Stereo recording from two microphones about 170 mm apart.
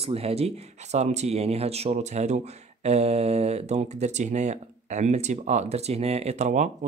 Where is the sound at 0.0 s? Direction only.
35° right (ahead or behind).